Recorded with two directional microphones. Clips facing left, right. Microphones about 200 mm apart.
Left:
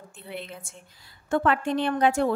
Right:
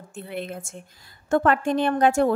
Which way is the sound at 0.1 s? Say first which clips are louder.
Right 6 dB; 50° right (ahead or behind).